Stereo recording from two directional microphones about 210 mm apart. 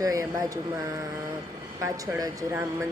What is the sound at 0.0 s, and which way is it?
Speech, 15° right (ahead or behind).